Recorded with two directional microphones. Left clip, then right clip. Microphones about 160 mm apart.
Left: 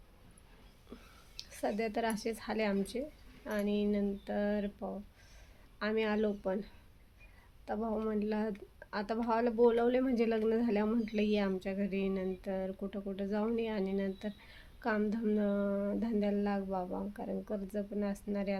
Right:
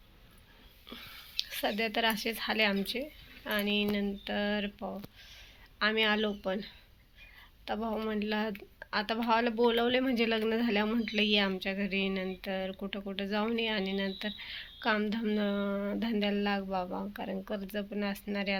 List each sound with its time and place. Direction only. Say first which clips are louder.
0.9 s speech: right 10 dB; centre (ahead or behind)
7.9 s speech: right 1 dB; centre (ahead or behind)
16.8 s speech: right 2 dB; 15° right (ahead or behind)
17.5 s speech: right 2 dB; 5° left (ahead or behind)